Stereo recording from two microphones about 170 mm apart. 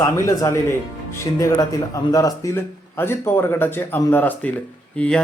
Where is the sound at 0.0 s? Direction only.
20° left (ahead or behind).